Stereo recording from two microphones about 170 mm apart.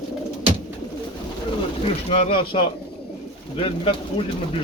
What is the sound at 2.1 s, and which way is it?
Speech, 30° left (ahead or behind).